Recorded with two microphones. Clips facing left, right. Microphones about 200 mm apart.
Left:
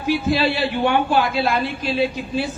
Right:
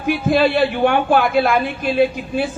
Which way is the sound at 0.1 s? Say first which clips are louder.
Right 4 dB; 50° right (ahead or behind).